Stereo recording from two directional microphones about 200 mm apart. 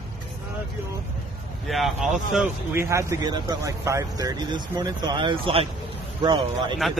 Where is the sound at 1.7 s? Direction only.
Centre (ahead or behind); by 5.7 s 25° right (ahead or behind).